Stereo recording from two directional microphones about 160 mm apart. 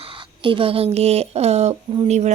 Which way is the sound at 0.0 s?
30° right (ahead or behind).